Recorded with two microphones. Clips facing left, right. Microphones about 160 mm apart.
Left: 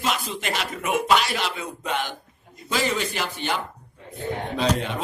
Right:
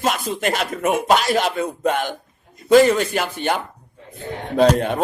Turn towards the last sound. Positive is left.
turn(degrees=-50)  # may be behind; listen again after turning